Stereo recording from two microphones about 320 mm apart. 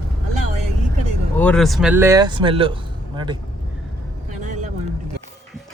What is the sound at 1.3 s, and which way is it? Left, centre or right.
Speech, centre.